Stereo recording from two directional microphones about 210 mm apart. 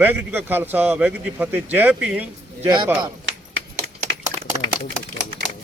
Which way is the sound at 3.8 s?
15° right (ahead or behind).